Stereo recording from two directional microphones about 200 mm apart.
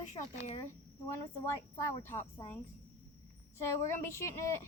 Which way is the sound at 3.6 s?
15° left (ahead or behind).